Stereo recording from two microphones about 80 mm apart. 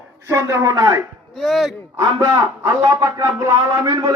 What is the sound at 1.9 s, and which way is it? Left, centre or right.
A man's voice, right.